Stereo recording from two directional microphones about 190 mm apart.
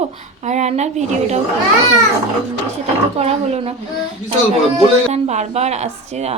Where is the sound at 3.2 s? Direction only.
35° right (ahead or behind).